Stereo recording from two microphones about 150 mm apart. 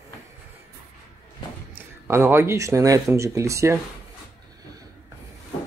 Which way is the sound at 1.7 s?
15° right (ahead or behind).